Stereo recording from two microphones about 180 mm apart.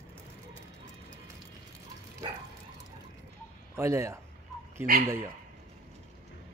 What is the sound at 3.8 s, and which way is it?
Speech, 15° right (ahead or behind).